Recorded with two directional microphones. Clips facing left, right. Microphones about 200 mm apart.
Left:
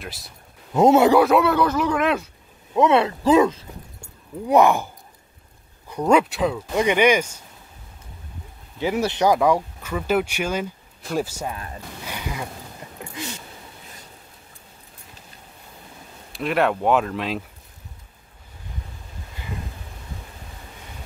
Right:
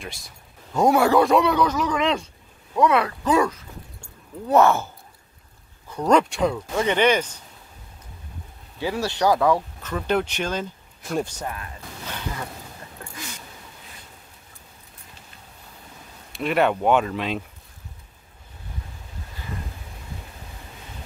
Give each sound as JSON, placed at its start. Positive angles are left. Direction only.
{"t": 0.0, "sound": "speech", "side_deg": 0}
{"t": 0.7, "sound": "speech", "side_deg": 20}
{"t": 1.2, "sound": "speech", "side_deg": 0}
{"t": 2.7, "sound": "speech", "side_deg": 25}
{"t": 6.7, "sound": "speech", "side_deg": 15}
{"t": 8.7, "sound": "speech", "side_deg": 20}
{"t": 12.0, "sound": "a sound", "side_deg": 10}
{"t": 13.0, "sound": "a sound", "side_deg": 20}
{"t": 16.3, "sound": "speech", "side_deg": 0}